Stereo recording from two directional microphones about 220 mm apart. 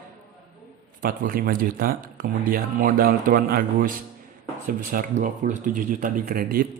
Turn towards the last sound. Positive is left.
turn(degrees=-40)  # may be behind; listen again after turning